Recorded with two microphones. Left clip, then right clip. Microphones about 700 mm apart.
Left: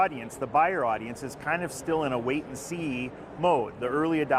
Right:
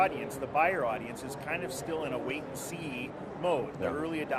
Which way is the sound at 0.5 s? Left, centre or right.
Left.